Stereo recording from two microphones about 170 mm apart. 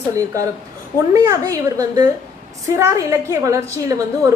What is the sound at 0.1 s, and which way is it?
A woman's voice, 20° right (ahead or behind).